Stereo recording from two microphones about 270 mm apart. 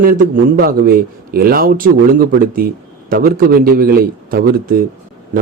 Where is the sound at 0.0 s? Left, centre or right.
Right.